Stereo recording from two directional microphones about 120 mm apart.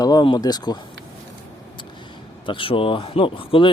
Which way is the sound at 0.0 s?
35° left (ahead or behind).